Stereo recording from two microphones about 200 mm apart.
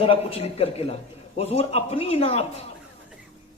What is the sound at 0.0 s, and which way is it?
A man's voice, 30° left (ahead or behind).